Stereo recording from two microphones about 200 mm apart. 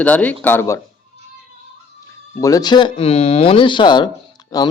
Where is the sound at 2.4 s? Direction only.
20° left (ahead or behind).